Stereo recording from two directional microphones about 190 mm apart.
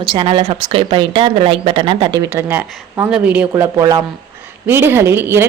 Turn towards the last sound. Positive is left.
turn(degrees=-10)  # may be behind; listen again after turning